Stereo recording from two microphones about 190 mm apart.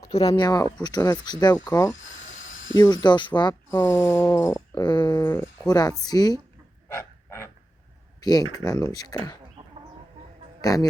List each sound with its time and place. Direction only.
0.3 s speech: 20° left (ahead or behind)
6.8 s a sound: 15° left (ahead or behind)
8.2 s speech: 20° left (ahead or behind)
10.6 s a man's voice: 20° left (ahead or behind)